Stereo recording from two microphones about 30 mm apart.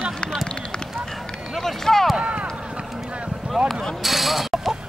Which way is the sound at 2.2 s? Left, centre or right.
Right.